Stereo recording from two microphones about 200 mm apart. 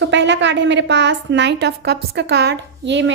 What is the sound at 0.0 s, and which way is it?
A woman's voice, 65° right (ahead or behind).